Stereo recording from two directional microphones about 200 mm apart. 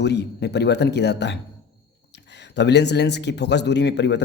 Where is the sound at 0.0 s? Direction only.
55° left (ahead or behind).